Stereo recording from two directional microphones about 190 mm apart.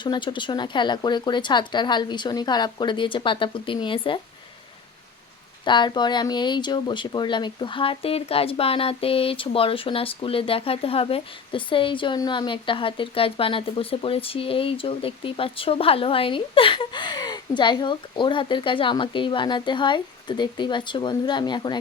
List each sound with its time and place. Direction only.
0.0 s speech: 25° left (ahead or behind)
5.6 s speech: 25° left (ahead or behind)